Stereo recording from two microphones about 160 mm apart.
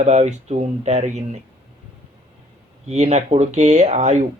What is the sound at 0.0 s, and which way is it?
Speech, 45° right (ahead or behind).